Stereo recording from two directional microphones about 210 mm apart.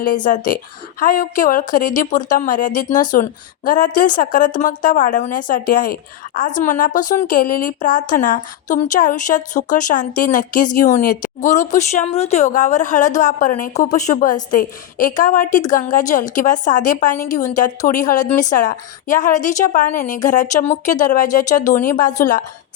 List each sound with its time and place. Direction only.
0.3 s a woman's voice: 40° left (ahead or behind)